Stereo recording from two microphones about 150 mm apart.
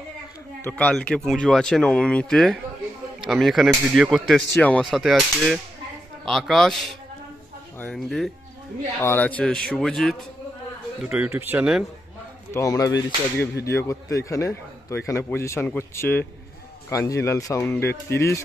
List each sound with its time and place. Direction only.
0.7 s speech: 10° left (ahead or behind)
11.0 s speech: 10° right (ahead or behind)
12.5 s a man's voice: 20° left (ahead or behind)